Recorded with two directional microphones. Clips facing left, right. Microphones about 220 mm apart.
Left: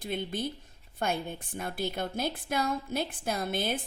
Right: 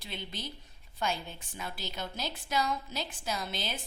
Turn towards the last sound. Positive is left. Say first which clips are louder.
# left 6 dB
turn(degrees=55)  # may be behind; listen again after turning